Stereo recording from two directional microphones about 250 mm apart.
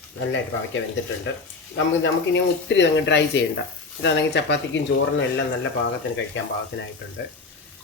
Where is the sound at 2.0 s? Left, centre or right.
Left.